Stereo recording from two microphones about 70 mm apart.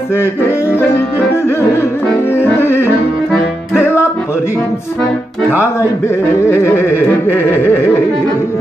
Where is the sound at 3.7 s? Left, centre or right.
Left.